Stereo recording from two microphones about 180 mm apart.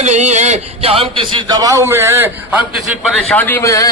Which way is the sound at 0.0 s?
40° right (ahead or behind).